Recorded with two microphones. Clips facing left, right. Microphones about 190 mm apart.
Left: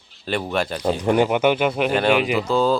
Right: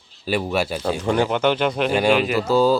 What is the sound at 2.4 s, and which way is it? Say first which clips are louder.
Speech: right 4 dB; 5° right (ahead or behind).